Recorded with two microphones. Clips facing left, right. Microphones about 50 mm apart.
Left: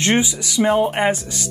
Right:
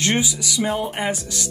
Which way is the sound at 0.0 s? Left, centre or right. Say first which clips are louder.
Left 3 dB; left.